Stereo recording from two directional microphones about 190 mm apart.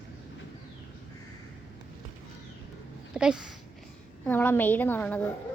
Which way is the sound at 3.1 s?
5° right (ahead or behind).